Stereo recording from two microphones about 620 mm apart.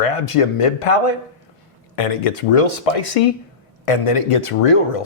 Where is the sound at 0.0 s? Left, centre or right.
Left.